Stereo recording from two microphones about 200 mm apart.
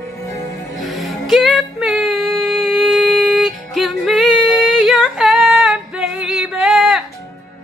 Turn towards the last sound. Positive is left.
turn(degrees=0)  # may be behind; listen again after turning